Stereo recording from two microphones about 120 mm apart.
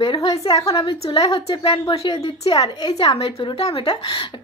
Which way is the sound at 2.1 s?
60° left (ahead or behind).